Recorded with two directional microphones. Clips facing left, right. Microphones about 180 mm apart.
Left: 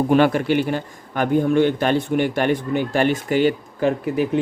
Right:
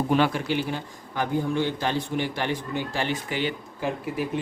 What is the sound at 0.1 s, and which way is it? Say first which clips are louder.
A man's voice: left 7 dB; 55° left (ahead or behind).